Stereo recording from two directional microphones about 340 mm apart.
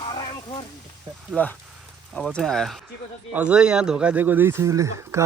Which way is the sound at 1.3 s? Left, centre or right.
Centre.